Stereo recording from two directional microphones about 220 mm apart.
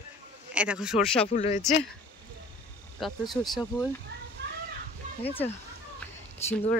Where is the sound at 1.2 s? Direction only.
30° left (ahead or behind).